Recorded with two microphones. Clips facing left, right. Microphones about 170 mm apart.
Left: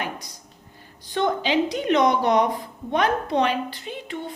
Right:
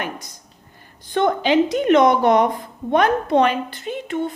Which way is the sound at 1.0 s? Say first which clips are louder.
Right 5 dB; 55° right (ahead or behind).